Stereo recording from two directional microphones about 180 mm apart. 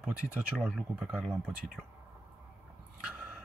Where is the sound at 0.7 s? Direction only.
5° right (ahead or behind).